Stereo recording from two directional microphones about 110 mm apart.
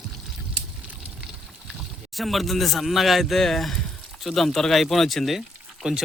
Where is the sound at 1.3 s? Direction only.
5° right (ahead or behind).